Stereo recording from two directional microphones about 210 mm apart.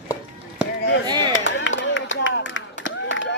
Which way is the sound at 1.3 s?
60° left (ahead or behind).